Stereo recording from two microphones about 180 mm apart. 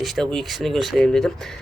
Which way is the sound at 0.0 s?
Centre (ahead or behind).